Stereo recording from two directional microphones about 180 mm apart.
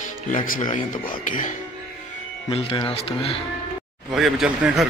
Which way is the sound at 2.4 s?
30° left (ahead or behind).